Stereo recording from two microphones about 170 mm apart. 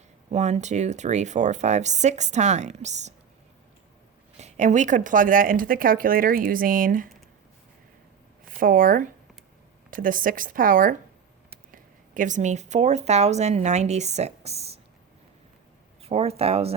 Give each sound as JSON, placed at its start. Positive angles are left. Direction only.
{"t": 0.3, "sound": "speech", "side_deg": -45}
{"t": 4.4, "sound": "speech", "side_deg": -40}
{"t": 8.5, "sound": "speech", "side_deg": -55}
{"t": 16.0, "sound": "speech", "side_deg": -35}